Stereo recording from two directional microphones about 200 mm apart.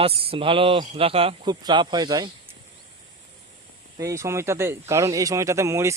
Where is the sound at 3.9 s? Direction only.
15° right (ahead or behind).